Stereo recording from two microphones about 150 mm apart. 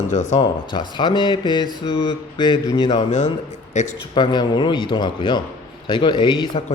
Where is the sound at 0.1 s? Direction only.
50° left (ahead or behind).